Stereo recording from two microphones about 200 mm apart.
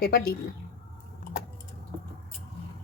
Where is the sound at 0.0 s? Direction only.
50° left (ahead or behind).